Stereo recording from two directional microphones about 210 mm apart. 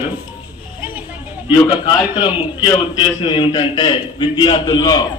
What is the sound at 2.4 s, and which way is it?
A man's voice, 15° left (ahead or behind).